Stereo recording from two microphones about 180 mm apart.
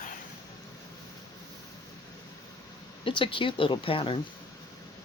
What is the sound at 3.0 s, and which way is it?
Speech, 30° left (ahead or behind).